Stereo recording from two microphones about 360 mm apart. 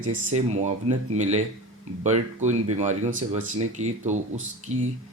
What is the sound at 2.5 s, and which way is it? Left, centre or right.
Speech, centre.